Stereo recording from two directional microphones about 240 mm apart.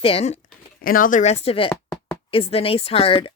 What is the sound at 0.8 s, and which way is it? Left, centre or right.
Speech, left.